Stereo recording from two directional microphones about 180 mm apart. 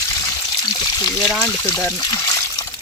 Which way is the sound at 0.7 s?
20° left (ahead or behind).